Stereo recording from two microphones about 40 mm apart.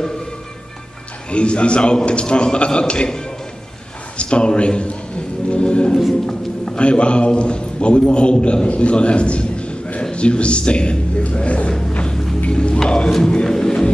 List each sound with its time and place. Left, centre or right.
1.3 s a man's voice: left
4.2 s a man's voice: left
12.4 s music: left
12.7 s music: centre